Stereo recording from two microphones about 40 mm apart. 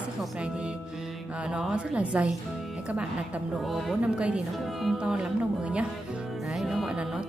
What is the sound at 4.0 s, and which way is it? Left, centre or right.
Speech, right.